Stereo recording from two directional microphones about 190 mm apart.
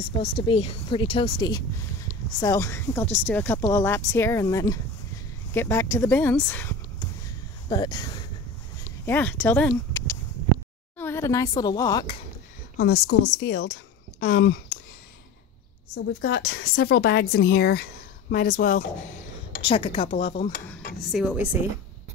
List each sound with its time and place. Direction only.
0.2 s speech: 30° left (ahead or behind); by 7.1 s 10° left (ahead or behind)
7.7 s speech: 20° left (ahead or behind)
9.0 s a woman's voice: 10° left (ahead or behind)
12.7 s speech: 55° left (ahead or behind)
15.9 s a woman's voice: 75° left (ahead or behind)
16.4 s speech: 55° left (ahead or behind)
19.6 s speech: 30° left (ahead or behind)
21.0 s a woman's voice: 5° right (ahead or behind)